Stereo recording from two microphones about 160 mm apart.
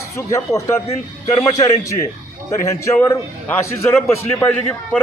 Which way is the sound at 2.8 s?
15° left (ahead or behind).